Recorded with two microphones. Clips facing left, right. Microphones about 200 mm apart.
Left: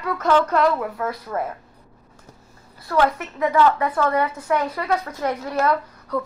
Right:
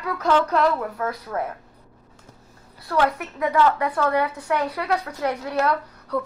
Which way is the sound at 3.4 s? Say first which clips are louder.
Left 2 dB; centre (ahead or behind).